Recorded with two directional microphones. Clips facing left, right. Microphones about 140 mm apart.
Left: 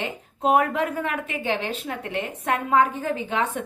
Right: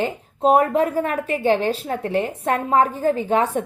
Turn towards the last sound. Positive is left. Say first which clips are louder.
# right 6 dB
turn(degrees=-40)  # may be behind; listen again after turning